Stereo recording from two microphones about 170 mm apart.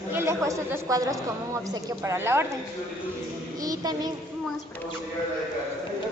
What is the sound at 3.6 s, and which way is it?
Child singing, 20° right (ahead or behind).